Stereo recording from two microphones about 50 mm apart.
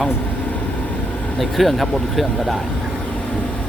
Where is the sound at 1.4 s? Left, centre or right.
Centre.